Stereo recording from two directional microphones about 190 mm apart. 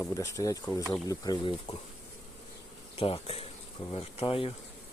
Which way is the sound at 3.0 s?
30° left (ahead or behind).